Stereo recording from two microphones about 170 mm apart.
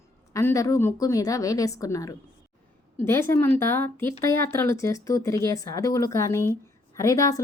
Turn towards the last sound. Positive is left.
turn(degrees=20)  # may be behind; listen again after turning